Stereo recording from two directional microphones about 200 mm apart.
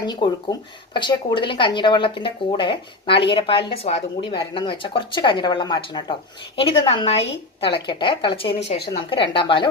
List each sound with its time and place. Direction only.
0.0 s speech: 20° left (ahead or behind)